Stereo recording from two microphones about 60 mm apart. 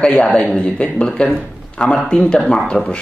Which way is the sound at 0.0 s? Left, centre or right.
Left.